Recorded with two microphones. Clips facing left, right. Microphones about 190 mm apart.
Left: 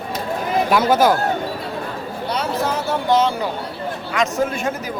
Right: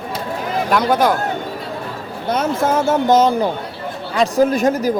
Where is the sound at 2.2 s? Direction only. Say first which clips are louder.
Right 5 dB; 50° right (ahead or behind).